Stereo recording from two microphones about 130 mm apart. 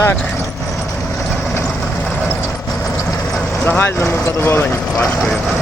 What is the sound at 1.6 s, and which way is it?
Vehicle, centre (ahead or behind).